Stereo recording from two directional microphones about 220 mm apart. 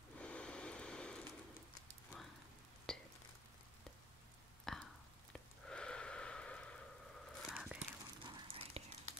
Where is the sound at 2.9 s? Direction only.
5° left (ahead or behind).